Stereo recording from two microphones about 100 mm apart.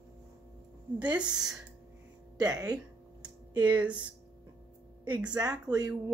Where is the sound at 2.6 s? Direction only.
40° right (ahead or behind).